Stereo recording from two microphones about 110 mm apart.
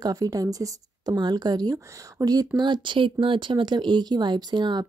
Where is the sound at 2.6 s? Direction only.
45° right (ahead or behind).